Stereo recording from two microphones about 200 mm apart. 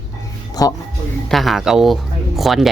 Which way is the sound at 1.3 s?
Centre (ahead or behind).